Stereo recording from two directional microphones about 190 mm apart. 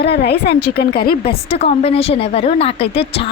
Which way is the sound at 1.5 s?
30° left (ahead or behind).